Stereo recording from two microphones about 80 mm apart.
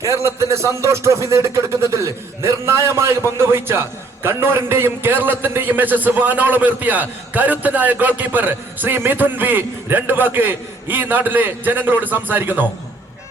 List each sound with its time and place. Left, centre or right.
0.0 s a man's voice: right